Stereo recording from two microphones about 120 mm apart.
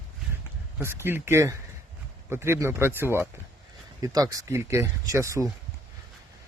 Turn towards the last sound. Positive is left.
turn(degrees=-25)  # may be behind; listen again after turning